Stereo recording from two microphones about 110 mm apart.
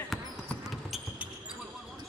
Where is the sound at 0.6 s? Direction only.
5° right (ahead or behind).